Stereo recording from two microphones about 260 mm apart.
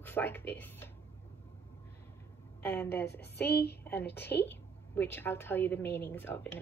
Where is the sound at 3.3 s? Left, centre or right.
Left.